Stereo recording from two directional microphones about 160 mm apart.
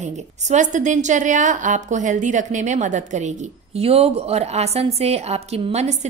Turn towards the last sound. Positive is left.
turn(degrees=-45)  # may be behind; listen again after turning